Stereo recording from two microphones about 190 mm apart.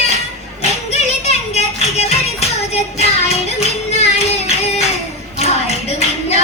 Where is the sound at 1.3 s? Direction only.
35° left (ahead or behind).